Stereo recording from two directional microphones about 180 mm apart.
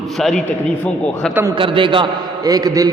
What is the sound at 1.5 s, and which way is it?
A man's voice, 30° right (ahead or behind).